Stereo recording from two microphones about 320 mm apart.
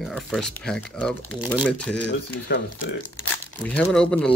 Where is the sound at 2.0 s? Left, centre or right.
Left.